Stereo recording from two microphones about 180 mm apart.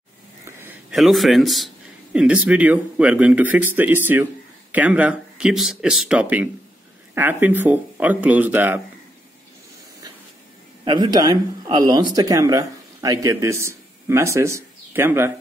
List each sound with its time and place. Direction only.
0.5 s a sound: 10° right (ahead or behind)
0.9 s speech: centre (ahead or behind)
10.9 s speech: 25° right (ahead or behind)